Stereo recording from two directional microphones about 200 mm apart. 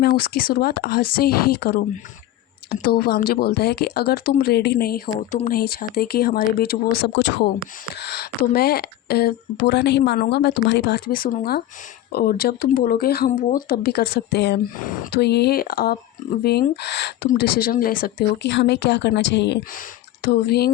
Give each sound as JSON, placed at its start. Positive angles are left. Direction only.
{"t": 0.2, "sound": "speech", "side_deg": 50}
{"t": 8.5, "sound": "speech", "side_deg": 50}
{"t": 17.2, "sound": "speech", "side_deg": 45}